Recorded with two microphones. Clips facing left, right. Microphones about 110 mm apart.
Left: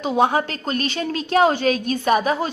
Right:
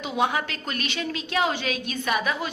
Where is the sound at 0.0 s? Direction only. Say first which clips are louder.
Left 6 dB; 35° left (ahead or behind).